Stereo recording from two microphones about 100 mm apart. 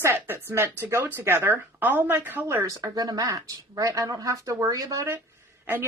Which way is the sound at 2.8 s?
40° right (ahead or behind).